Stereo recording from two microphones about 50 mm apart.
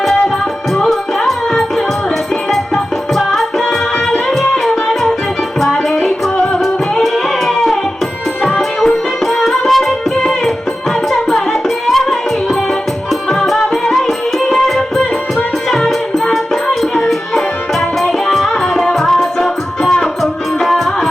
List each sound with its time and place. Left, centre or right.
0.8 s music: centre
8.4 s music: centre
9.2 s music: centre
11.1 s music: centre
13.8 s music: centre